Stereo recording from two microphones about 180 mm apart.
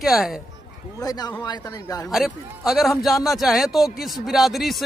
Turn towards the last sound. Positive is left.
turn(degrees=0)  # may be behind; listen again after turning